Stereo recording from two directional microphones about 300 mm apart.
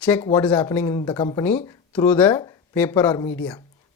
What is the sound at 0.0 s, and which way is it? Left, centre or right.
Speech, centre.